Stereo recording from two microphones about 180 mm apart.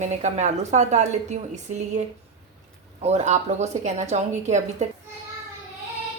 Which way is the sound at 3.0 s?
40° right (ahead or behind).